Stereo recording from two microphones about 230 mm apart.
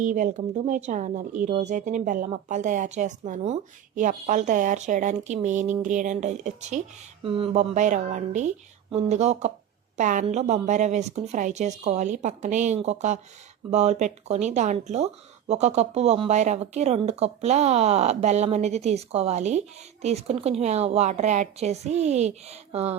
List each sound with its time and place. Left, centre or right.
0.0 s speech: right